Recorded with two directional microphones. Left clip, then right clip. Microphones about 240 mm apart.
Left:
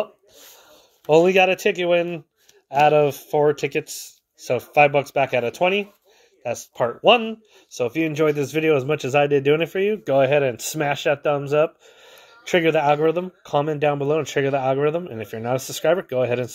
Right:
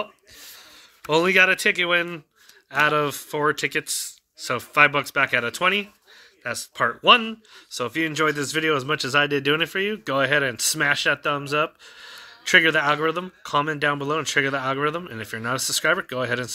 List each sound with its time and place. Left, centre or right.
1.0 s speech: centre
3.1 s speech: right
4.6 s speech: centre